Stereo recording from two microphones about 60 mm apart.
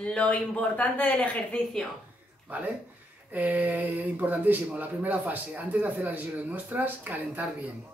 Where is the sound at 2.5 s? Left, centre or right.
Right.